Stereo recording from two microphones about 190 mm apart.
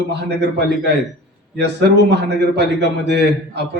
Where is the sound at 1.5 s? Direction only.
65° right (ahead or behind).